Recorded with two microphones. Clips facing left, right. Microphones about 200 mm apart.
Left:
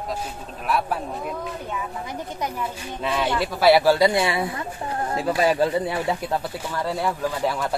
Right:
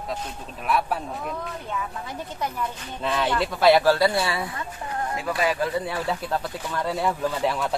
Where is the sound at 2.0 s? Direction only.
10° left (ahead or behind).